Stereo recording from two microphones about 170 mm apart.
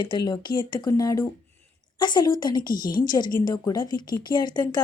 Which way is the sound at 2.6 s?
55° left (ahead or behind).